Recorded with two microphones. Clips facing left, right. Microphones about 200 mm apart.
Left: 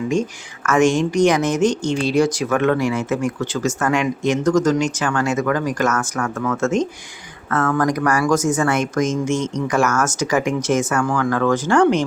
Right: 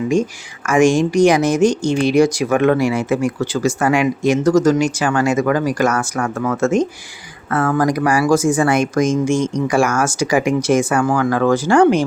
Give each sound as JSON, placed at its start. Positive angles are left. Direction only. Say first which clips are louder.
{"t": 0.7, "sound": "speech", "louder": "right 3 dB", "side_deg": -10}